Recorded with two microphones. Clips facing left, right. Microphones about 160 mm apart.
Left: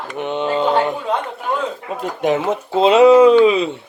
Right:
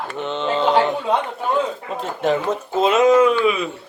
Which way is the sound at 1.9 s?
15° left (ahead or behind).